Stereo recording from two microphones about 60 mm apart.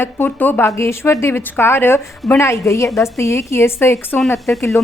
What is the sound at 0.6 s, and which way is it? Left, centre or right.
A woman's voice, left.